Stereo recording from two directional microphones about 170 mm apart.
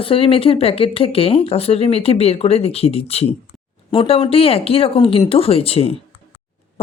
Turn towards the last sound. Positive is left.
turn(degrees=35)  # may be behind; listen again after turning